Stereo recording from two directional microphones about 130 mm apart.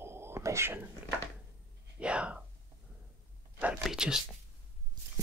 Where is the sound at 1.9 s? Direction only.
10° right (ahead or behind).